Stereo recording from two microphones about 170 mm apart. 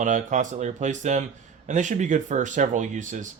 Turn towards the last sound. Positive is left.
turn(degrees=-50)  # may be behind; listen again after turning